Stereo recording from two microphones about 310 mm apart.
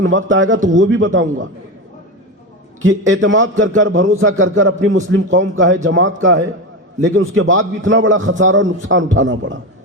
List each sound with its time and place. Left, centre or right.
0.0 s a man's voice: right
2.8 s a man's voice: right